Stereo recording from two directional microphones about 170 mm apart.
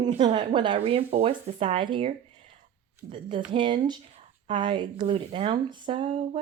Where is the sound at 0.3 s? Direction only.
30° right (ahead or behind).